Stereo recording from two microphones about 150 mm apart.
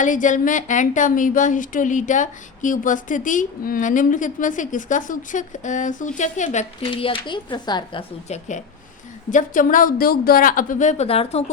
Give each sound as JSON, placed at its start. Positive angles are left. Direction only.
{"t": 0.0, "sound": "a woman's voice", "side_deg": 60}
{"t": 6.9, "sound": "speech", "side_deg": 35}
{"t": 8.3, "sound": "speech", "side_deg": 50}
{"t": 9.3, "sound": "a woman's voice", "side_deg": 60}